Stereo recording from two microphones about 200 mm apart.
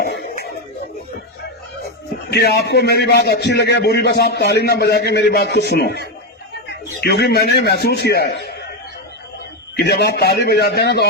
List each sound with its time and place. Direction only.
0.0 s a sound: 50° left (ahead or behind)
2.3 s a man's voice: 55° left (ahead or behind)
9.7 s a man's voice: 55° left (ahead or behind)